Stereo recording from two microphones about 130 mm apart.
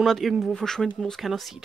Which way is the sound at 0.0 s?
Centre (ahead or behind).